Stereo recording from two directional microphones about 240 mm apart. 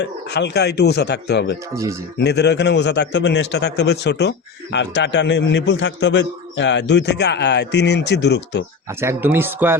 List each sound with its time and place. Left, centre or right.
0.0 s a man's voice: left
1.7 s speech: centre
2.1 s a man's voice: left
8.9 s speech: centre